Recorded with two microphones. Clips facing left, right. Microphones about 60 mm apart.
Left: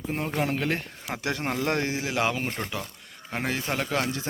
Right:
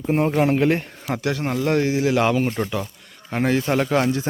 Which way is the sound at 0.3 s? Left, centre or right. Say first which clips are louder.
Right 7 dB; right.